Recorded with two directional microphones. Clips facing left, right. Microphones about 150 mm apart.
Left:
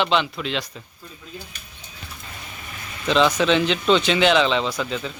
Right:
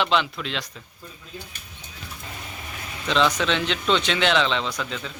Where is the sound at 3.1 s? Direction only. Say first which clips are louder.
Left 4 dB; 5° left (ahead or behind).